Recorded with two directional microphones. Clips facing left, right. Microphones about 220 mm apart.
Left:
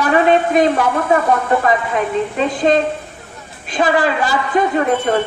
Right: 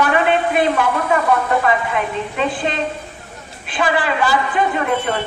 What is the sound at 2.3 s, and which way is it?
A woman's voice, 40° left (ahead or behind).